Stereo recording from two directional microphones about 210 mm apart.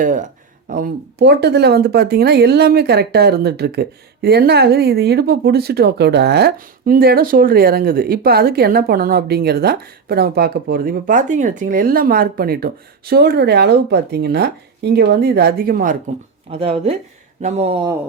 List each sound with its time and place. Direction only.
0.0 s speech: 40° right (ahead or behind)
16.5 s speech: 30° right (ahead or behind)